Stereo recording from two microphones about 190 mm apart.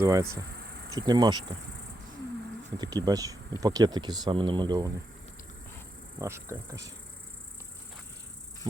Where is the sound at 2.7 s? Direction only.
20° right (ahead or behind).